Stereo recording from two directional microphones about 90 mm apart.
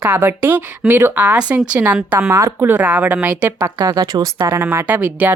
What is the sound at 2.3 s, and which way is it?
Speech, 35° right (ahead or behind).